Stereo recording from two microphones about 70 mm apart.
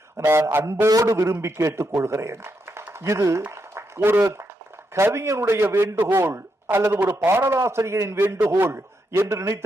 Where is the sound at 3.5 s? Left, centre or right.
Right.